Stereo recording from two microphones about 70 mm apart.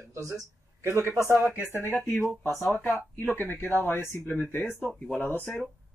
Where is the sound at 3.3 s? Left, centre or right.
Left.